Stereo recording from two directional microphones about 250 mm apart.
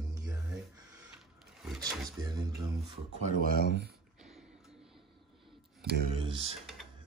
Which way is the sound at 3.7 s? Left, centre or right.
Right.